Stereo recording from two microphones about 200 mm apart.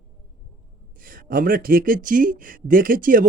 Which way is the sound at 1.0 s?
45° right (ahead or behind).